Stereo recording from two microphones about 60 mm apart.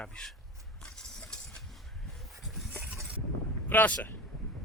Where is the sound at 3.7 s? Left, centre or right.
Left.